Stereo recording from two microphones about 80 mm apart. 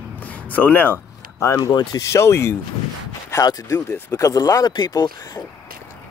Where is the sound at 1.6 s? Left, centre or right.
Left.